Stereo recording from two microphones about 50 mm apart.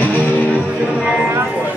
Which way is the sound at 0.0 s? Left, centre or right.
Left.